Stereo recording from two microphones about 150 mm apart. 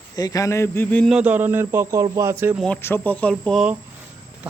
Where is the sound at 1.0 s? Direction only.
5° right (ahead or behind).